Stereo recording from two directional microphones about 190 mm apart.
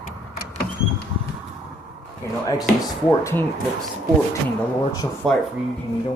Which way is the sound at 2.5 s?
20° left (ahead or behind).